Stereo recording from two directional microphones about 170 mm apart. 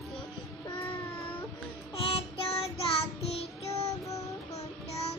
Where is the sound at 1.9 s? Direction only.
35° left (ahead or behind).